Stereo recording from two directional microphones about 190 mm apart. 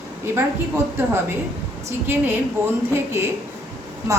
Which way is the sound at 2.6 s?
10° right (ahead or behind).